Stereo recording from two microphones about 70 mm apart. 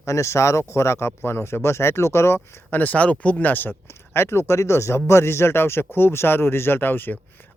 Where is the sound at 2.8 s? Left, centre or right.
Left.